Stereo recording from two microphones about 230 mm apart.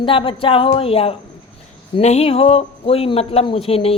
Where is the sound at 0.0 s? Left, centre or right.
Left.